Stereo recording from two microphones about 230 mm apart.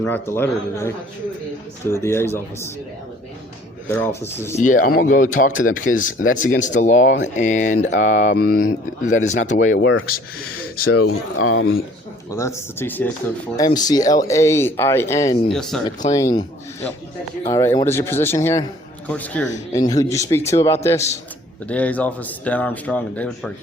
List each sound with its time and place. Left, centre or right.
0.0 s speech: centre
2.0 s speech: centre
3.8 s speech: centre
4.5 s speech: left
9.7 s speech: left
10.9 s speech: left
12.3 s speech: centre
15.4 s speech: centre
16.1 s speech: centre